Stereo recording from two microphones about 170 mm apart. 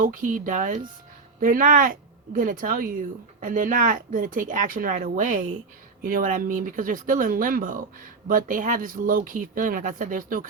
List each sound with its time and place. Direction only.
0.0 s speech: 50° right (ahead or behind)